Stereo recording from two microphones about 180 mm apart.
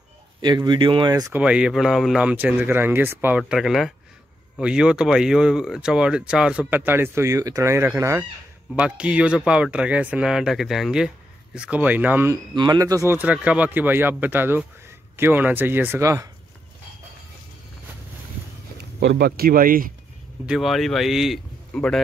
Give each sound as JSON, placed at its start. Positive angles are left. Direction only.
{"t": 0.4, "sound": "speech", "side_deg": -25}
{"t": 1.3, "sound": "speech", "side_deg": -5}
{"t": 12.5, "sound": "speech", "side_deg": -20}
{"t": 18.9, "sound": "speech", "side_deg": -65}
{"t": 20.4, "sound": "speech", "side_deg": 0}